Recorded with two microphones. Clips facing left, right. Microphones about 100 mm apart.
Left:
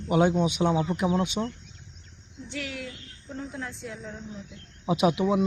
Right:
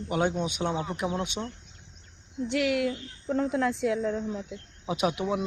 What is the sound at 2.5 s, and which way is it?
Speech, 70° right (ahead or behind).